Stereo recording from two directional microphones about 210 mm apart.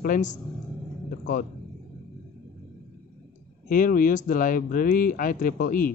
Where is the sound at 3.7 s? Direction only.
40° left (ahead or behind).